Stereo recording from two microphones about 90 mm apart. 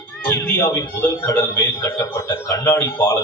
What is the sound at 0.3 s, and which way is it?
A man's voice, 30° left (ahead or behind).